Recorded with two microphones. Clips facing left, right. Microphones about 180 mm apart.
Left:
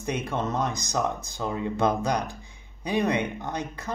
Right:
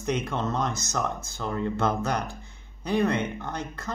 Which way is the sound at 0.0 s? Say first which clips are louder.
Right 1 dB; 10° left (ahead or behind).